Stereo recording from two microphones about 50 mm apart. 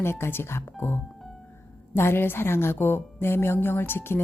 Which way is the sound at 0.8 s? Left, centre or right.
Left.